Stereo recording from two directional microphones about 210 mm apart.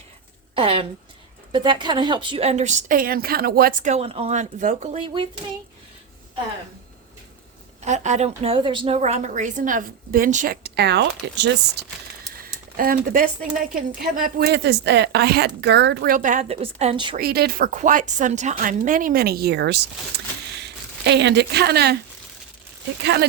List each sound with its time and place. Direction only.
0.5 s speech: 25° right (ahead or behind)
7.9 s speech: 35° right (ahead or behind)
8.4 s speech: 25° right (ahead or behind); by 11.9 s 55° right (ahead or behind)
12.4 s a sound: 45° right (ahead or behind)
14.0 s a woman's voice: 45° right (ahead or behind); by 17.2 s 25° right (ahead or behind)
17.2 s a woman's voice: 45° right (ahead or behind)